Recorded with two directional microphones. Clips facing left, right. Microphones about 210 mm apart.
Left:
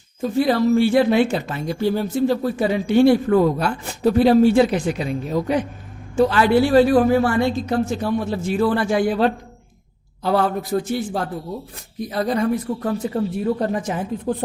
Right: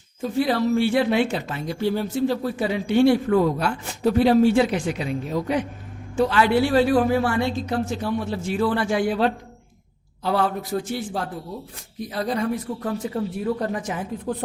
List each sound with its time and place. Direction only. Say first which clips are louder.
0.2 s speech: left 4 dB; 45° left (ahead or behind)
13.4 s speech: left 4 dB; 30° left (ahead or behind)